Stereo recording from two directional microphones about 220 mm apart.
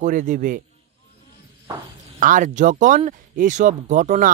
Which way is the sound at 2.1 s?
35° right (ahead or behind).